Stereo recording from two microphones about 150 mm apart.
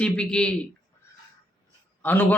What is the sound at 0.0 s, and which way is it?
Speech, 5° left (ahead or behind).